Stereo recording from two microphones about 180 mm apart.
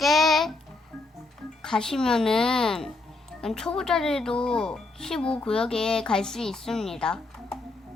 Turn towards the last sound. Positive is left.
turn(degrees=5)  # may be behind; listen again after turning